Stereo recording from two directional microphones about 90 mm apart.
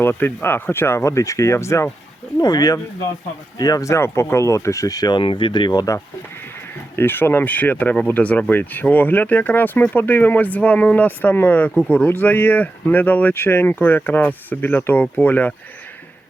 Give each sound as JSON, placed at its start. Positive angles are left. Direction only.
{"t": 0.0, "sound": "speech", "side_deg": 25}
{"t": 2.4, "sound": "speech", "side_deg": 50}
{"t": 5.1, "sound": "speech", "side_deg": 70}
{"t": 6.9, "sound": "speech", "side_deg": 25}